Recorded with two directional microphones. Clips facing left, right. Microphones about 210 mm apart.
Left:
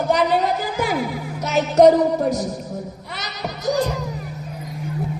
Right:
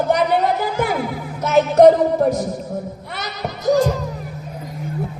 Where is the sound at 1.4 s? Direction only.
55° right (ahead or behind).